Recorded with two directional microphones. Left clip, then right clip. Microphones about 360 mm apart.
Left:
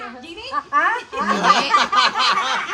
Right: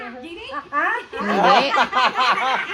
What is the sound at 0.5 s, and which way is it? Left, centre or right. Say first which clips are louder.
Speech: left 3 dB; centre.